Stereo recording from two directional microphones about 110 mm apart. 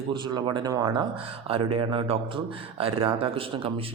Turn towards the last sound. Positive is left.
turn(degrees=-55)  # may be behind; listen again after turning